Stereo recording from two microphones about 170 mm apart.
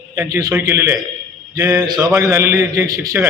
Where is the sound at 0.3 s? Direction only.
20° right (ahead or behind).